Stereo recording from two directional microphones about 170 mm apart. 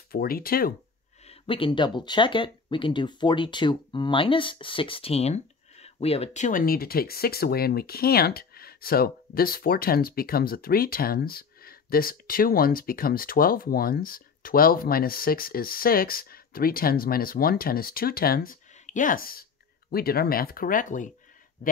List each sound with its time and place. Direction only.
0.1 s speech: 60° left (ahead or behind)
1.2 s speech: 35° left (ahead or behind); by 21.1 s 50° left (ahead or behind)